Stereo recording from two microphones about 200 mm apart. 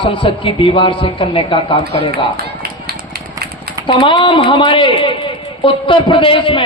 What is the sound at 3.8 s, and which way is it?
A man's voice, 25° left (ahead or behind).